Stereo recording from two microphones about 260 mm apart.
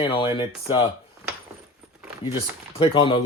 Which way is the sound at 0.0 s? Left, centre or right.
Centre.